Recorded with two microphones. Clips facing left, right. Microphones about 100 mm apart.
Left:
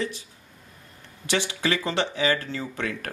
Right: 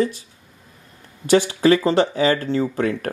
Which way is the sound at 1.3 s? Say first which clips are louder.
Right 11 dB; 40° right (ahead or behind).